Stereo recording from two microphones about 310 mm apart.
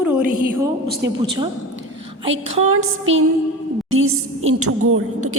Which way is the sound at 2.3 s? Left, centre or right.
Right.